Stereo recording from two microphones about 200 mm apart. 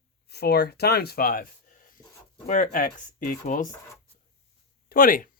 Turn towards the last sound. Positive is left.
turn(degrees=45)  # may be behind; listen again after turning